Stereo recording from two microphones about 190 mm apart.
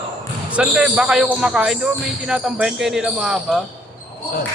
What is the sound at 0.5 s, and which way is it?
Speech, 5° right (ahead or behind).